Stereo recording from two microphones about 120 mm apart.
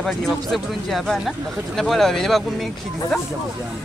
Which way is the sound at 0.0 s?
5° left (ahead or behind).